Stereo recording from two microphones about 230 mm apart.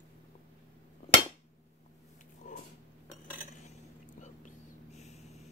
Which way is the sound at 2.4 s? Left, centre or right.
Left.